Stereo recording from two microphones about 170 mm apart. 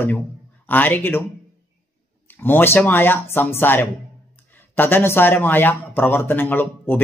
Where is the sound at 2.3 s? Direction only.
10° left (ahead or behind).